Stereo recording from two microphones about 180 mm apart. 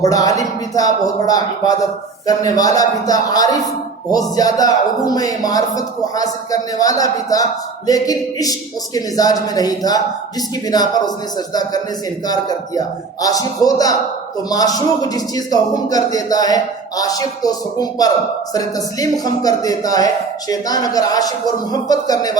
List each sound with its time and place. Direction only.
0.0 s speech: 20° left (ahead or behind)
19.2 s speech: 20° left (ahead or behind)